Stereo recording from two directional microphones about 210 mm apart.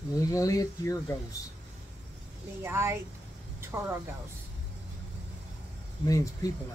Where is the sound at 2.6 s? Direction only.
10° right (ahead or behind).